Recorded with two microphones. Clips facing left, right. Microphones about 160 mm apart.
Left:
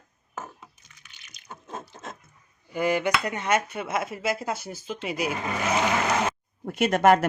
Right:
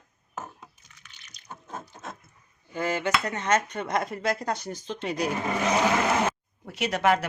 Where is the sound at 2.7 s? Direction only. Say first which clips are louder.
Left 3 dB; 15° left (ahead or behind).